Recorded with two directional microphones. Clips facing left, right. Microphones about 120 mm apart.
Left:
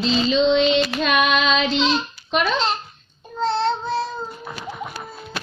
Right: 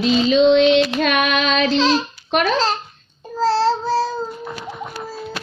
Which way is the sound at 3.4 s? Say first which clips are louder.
Right 4 dB; 35° right (ahead or behind).